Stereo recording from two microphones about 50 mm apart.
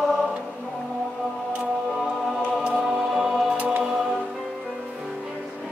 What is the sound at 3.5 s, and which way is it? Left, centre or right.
Music, right.